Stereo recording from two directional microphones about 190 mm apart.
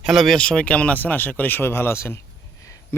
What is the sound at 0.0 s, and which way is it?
Speech, centre (ahead or behind).